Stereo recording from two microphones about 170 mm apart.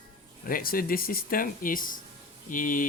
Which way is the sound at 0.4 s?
60° left (ahead or behind).